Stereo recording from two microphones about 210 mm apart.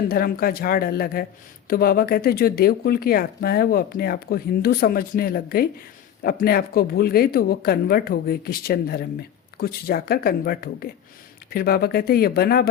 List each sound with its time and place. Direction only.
0.1 s speech: 45° left (ahead or behind)